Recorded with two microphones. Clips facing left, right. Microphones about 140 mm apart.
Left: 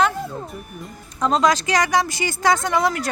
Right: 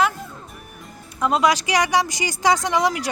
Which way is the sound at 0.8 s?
5° right (ahead or behind).